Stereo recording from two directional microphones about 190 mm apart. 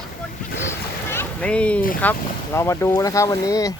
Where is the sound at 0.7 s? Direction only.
10° left (ahead or behind).